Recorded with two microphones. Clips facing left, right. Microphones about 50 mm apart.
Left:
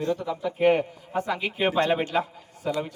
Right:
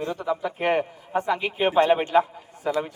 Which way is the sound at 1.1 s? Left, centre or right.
Right.